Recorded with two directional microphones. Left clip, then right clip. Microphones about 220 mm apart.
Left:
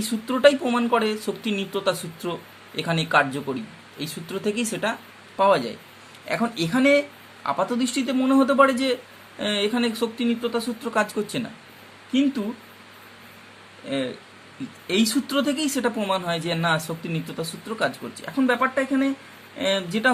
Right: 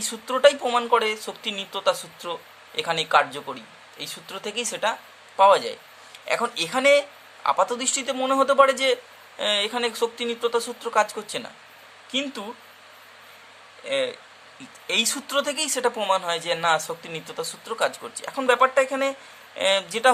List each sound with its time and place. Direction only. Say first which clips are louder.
0.0 s speech: even; 20° right (ahead or behind)
14.8 s speech: even; 15° right (ahead or behind)